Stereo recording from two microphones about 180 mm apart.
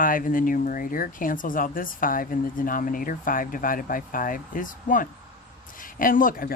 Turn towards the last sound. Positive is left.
turn(degrees=50)  # may be behind; listen again after turning